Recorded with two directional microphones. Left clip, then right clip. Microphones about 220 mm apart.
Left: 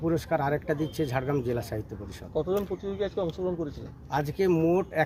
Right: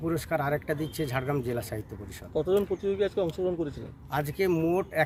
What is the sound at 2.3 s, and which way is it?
Speech, 40° right (ahead or behind).